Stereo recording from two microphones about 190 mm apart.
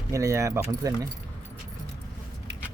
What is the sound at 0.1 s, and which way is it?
Speech, 15° right (ahead or behind).